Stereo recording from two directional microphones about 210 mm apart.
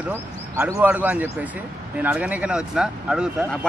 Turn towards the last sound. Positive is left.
turn(degrees=-5)  # may be behind; listen again after turning